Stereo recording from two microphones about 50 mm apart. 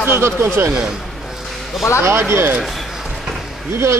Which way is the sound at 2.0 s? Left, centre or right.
Right.